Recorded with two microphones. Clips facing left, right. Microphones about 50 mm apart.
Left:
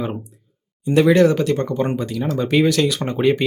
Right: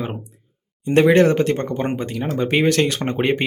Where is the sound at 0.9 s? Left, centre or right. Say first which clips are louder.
Even; right.